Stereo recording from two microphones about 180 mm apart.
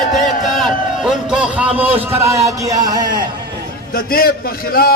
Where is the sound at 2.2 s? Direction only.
15° right (ahead or behind).